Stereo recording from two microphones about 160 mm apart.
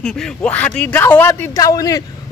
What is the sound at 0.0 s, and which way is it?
A man's voice, 5° left (ahead or behind).